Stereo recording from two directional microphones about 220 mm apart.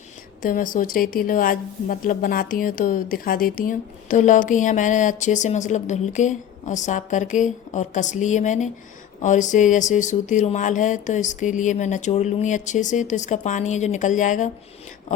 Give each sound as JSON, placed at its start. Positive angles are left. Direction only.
{"t": 0.4, "sound": "a woman's voice", "side_deg": 40}